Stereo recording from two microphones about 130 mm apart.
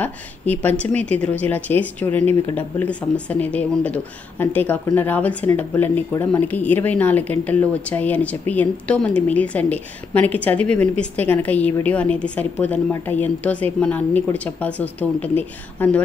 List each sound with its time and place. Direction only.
0.0 s a woman's voice: 15° left (ahead or behind)